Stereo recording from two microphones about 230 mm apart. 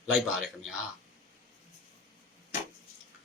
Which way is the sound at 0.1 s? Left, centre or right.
Centre.